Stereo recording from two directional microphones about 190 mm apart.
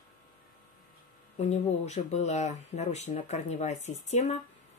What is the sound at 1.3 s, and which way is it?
Speech, 35° left (ahead or behind).